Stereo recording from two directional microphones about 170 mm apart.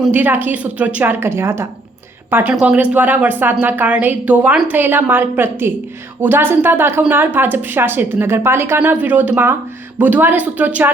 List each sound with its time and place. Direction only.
0.0 s speech: 10° right (ahead or behind)